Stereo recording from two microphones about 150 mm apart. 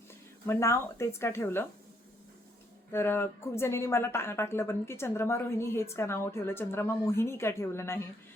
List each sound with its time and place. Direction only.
0.4 s speech: 20° left (ahead or behind)
2.9 s speech: 15° left (ahead or behind)